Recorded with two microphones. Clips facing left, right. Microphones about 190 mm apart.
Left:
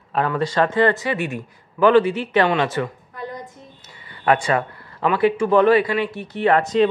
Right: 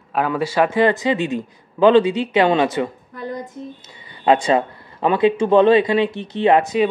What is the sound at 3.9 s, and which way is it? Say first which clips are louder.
Speech: right 3 dB; 20° right (ahead or behind).